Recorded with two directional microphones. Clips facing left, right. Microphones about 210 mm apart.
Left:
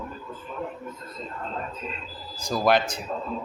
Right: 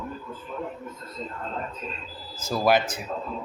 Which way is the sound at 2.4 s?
5° right (ahead or behind).